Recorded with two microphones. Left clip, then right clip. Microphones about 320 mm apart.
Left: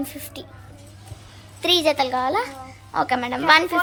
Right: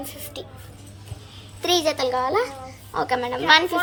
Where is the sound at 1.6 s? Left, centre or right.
Centre.